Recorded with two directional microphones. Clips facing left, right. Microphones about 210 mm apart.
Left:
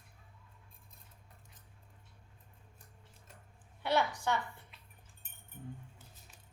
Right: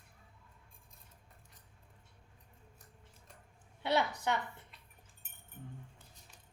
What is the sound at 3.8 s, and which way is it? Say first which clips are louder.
Speech: even; 20° right (ahead or behind).